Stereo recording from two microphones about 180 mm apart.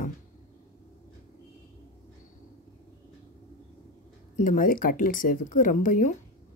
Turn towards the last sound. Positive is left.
turn(degrees=50)  # may be behind; listen again after turning